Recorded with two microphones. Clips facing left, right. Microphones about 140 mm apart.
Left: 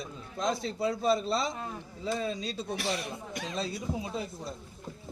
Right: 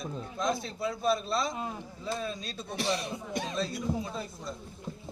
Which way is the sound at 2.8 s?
25° right (ahead or behind).